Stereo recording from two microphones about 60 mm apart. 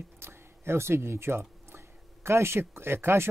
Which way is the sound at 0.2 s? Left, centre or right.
Right.